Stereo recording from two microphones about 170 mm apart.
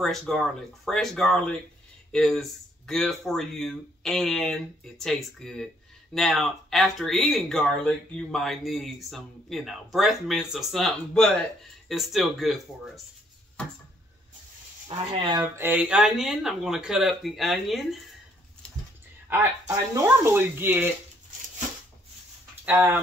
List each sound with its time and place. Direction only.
0.0 s speech: 5° left (ahead or behind)
14.9 s speech: 25° right (ahead or behind)
15.4 s speech: 15° right (ahead or behind)
19.2 s speech: 15° right (ahead or behind)
22.7 s speech: 10° right (ahead or behind)